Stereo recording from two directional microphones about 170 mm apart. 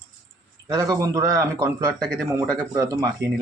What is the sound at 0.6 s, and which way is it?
Speech, 20° right (ahead or behind).